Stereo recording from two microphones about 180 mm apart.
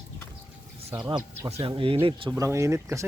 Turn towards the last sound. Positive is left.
turn(degrees=-15)  # may be behind; listen again after turning